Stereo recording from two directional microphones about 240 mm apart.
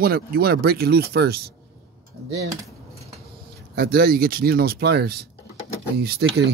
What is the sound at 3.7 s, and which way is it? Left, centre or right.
Speech, right.